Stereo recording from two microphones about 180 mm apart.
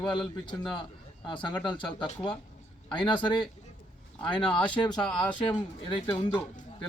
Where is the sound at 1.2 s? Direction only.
25° left (ahead or behind).